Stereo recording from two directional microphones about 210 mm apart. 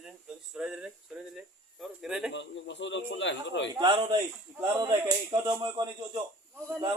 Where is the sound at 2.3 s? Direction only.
60° left (ahead or behind).